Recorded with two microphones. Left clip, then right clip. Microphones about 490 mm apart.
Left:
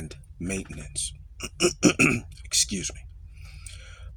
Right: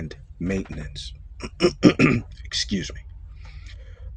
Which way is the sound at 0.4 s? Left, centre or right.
Left.